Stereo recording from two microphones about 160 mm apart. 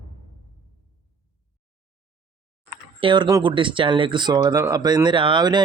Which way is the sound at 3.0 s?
30° right (ahead or behind).